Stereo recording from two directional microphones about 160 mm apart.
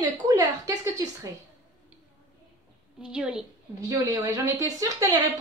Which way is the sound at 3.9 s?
20° right (ahead or behind).